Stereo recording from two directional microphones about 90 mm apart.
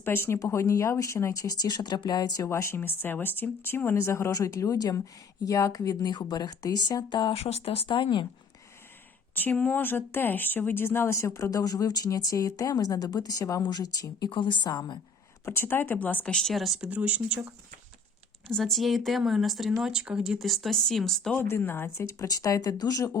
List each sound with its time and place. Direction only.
0.0 s speech: 25° left (ahead or behind); by 2.5 s 45° left (ahead or behind)
2.5 s speech: 30° left (ahead or behind); by 7.3 s 55° left (ahead or behind)
7.3 s speech: 90° left; by 8.3 s 65° left (ahead or behind)
9.3 s speech: 20° left (ahead or behind); by 14.3 s 45° left (ahead or behind)
14.3 s a woman's voice: 65° left (ahead or behind)
15.4 s speech: 25° left (ahead or behind)
16.2 s speech: 5° left (ahead or behind)
16.8 s speech: 15° right (ahead or behind)
18.5 s speech: centre (ahead or behind)
21.3 s speech: 25° left (ahead or behind); by 23.0 s 45° left (ahead or behind)